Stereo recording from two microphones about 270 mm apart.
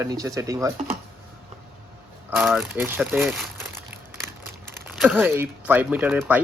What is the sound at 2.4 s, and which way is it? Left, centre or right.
Speech, centre.